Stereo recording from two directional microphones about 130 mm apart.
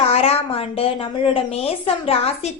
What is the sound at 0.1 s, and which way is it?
A woman's voice, 50° left (ahead or behind).